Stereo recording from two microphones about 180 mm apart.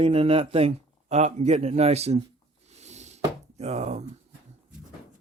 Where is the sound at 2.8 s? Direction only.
40° right (ahead or behind).